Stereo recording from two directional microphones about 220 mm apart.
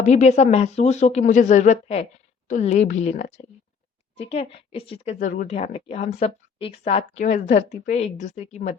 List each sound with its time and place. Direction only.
0.0 s a woman's voice: 30° left (ahead or behind)